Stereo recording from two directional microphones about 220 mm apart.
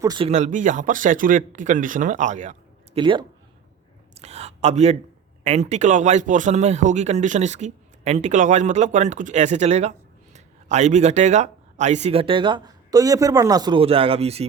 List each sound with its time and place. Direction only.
0.0 s speech: 20° right (ahead or behind)
0.3 s speech: 35° right (ahead or behind)
3.0 s speech: 20° right (ahead or behind)